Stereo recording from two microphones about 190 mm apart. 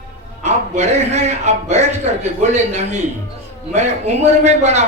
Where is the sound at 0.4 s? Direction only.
35° right (ahead or behind).